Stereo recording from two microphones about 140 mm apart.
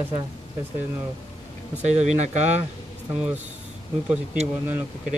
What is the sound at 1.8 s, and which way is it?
Speech, 55° right (ahead or behind).